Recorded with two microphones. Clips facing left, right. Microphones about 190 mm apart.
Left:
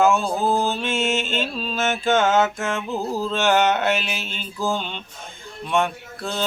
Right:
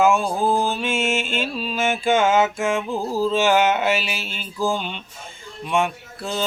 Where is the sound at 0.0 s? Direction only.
10° right (ahead or behind).